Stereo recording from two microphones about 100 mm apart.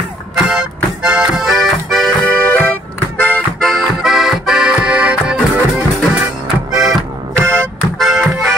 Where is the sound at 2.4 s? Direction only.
20° left (ahead or behind).